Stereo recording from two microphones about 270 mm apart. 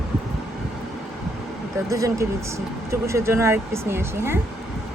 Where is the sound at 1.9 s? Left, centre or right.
Centre.